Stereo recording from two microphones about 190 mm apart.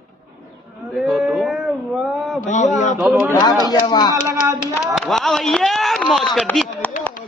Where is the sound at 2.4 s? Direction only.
40° left (ahead or behind).